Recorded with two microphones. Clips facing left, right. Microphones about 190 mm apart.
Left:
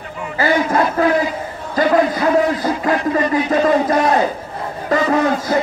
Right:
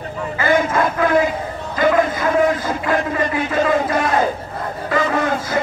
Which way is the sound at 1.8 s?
40° left (ahead or behind).